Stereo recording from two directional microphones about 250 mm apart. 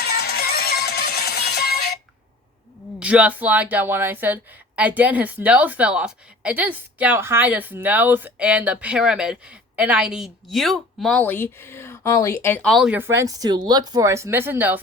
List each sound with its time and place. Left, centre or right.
0.0 s music: left
3.0 s speech: centre